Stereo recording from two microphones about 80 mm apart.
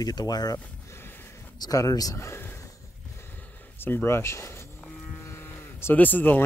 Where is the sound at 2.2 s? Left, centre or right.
Left.